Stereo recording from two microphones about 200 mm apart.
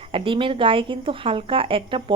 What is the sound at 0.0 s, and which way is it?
Speech, 25° right (ahead or behind).